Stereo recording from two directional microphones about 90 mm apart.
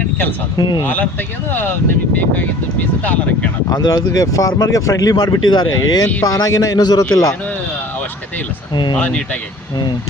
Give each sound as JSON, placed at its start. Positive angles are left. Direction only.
{"t": 0.5, "sound": "speech", "side_deg": 55}
{"t": 2.1, "sound": "speech", "side_deg": 20}
{"t": 3.9, "sound": "speech", "side_deg": 40}
{"t": 8.7, "sound": "speech", "side_deg": 55}
{"t": 9.0, "sound": "speech", "side_deg": 15}